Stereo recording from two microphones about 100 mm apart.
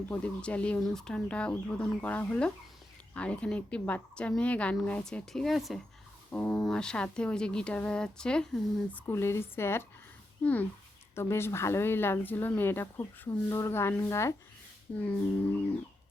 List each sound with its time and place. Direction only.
0.1 s speech: 15° left (ahead or behind)
6.3 s speech: 15° left (ahead or behind)
9.0 s speech: 25° left (ahead or behind)
14.9 s speech: 15° left (ahead or behind)